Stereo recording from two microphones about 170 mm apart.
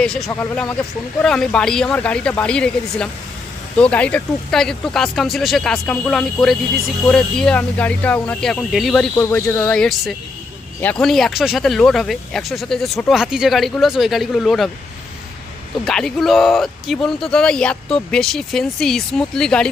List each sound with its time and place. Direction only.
0.0 s speech: 5° left (ahead or behind)
0.3 s speech: 15° left (ahead or behind)
15.8 s speech: 5° left (ahead or behind)